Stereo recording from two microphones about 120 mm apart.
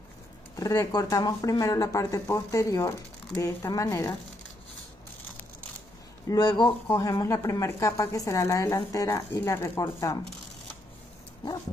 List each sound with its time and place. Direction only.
0.6 s speech: 30° left (ahead or behind)
6.2 s speech: 35° left (ahead or behind)